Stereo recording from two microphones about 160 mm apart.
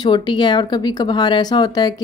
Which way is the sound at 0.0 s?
30° left (ahead or behind).